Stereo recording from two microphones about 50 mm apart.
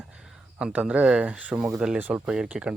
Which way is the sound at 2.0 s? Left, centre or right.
Right.